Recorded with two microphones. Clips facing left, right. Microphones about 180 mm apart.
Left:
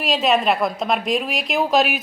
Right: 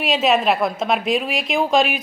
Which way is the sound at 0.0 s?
Centre (ahead or behind).